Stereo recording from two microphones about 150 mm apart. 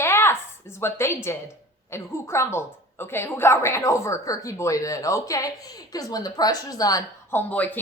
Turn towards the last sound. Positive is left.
turn(degrees=10)  # may be behind; listen again after turning